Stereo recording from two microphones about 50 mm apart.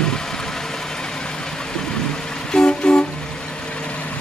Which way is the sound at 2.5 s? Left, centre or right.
Centre.